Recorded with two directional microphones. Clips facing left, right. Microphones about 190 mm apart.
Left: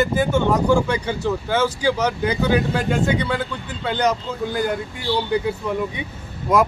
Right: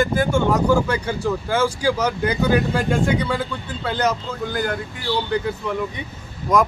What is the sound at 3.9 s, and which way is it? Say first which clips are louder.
Speech: left 1 dB; 5° right (ahead or behind).